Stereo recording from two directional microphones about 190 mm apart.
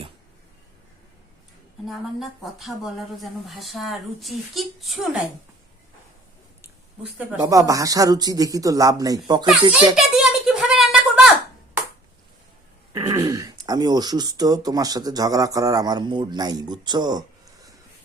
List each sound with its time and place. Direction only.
1.8 s speech: centre (ahead or behind)
7.2 s speech: 10° right (ahead or behind)
9.7 s a sound: 5° right (ahead or behind)
12.9 s speech: 20° right (ahead or behind)